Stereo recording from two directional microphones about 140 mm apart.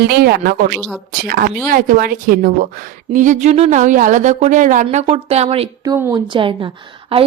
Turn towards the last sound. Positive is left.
turn(degrees=-40)  # may be behind; listen again after turning